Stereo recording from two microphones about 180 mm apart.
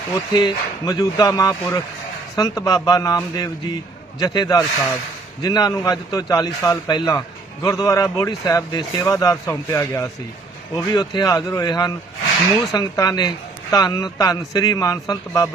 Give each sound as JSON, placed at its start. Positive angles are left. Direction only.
{"t": 0.1, "sound": "a man's voice", "side_deg": 20}